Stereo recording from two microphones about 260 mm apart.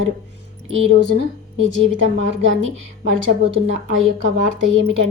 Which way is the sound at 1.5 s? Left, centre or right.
Right.